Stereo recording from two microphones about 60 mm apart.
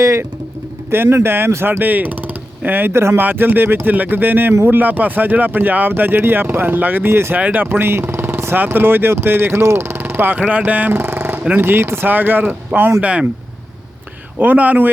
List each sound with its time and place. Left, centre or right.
0.0 s speech: right
0.9 s speech: right
2.9 s speech: right
3.2 s speech: right
7.3 s speech: right
8.5 s speech: right
13.0 s speech: right
14.3 s speech: right